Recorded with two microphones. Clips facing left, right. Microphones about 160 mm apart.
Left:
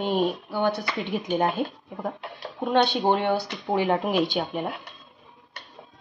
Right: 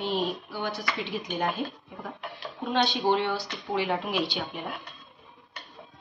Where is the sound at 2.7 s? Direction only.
55° left (ahead or behind).